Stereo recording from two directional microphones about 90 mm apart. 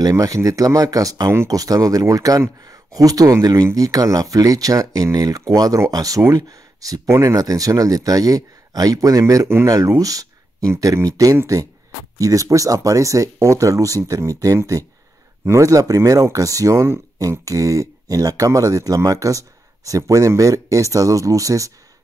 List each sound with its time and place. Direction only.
0.0 s speech: 40° right (ahead or behind)